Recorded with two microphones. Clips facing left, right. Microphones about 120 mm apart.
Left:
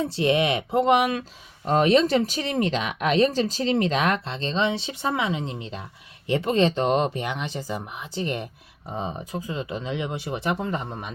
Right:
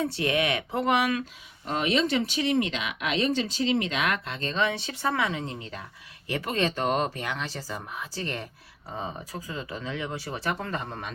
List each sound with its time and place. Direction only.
0.0 s speech: 25° left (ahead or behind)
1.6 s speech: 40° left (ahead or behind); by 11.1 s 15° left (ahead or behind)